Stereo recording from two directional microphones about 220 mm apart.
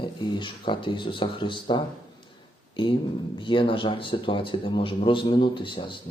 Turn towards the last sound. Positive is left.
turn(degrees=20)  # may be behind; listen again after turning